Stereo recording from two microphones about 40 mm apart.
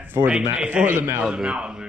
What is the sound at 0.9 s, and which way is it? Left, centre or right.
Speech, right.